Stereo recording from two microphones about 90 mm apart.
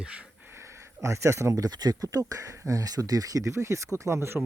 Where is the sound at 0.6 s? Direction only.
30° right (ahead or behind).